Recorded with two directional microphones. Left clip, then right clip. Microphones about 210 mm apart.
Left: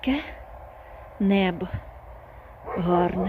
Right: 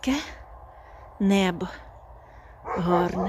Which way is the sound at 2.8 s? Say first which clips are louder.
Left 1 dB; 5° right (ahead or behind).